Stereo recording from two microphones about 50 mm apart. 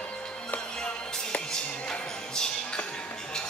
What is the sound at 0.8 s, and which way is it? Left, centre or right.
Music, centre.